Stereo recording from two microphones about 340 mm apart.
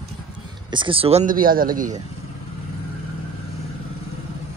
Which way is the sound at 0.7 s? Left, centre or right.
Centre.